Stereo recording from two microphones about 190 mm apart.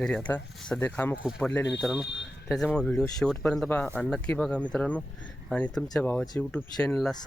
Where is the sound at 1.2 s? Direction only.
5° right (ahead or behind).